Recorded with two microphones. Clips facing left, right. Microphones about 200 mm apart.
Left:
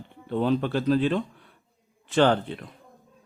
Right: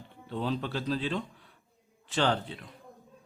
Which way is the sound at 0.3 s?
60° left (ahead or behind).